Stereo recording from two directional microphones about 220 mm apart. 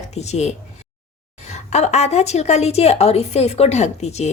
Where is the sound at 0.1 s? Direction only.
30° left (ahead or behind).